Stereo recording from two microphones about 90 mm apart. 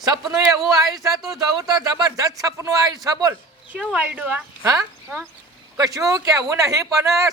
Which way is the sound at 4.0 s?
20° right (ahead or behind).